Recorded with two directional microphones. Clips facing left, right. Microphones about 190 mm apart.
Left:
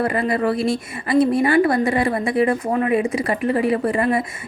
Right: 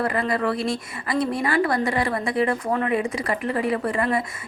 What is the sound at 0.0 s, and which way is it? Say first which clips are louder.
A woman's voice: left 3 dB; 25° left (ahead or behind).